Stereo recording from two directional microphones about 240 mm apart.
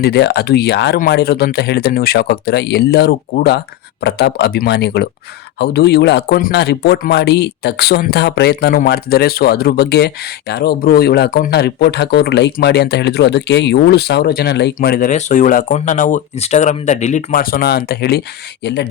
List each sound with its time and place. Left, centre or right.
0.0 s speech: left